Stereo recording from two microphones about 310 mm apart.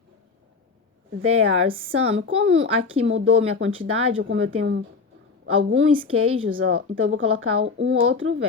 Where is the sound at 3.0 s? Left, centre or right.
Right.